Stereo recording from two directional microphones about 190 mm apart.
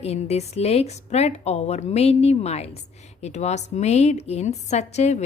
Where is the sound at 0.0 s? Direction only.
35° left (ahead or behind).